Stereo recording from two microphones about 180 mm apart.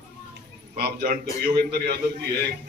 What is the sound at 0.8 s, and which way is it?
Speech, 60° right (ahead or behind).